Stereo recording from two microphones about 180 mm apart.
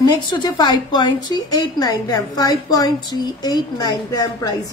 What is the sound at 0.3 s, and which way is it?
A woman's voice, 25° left (ahead or behind).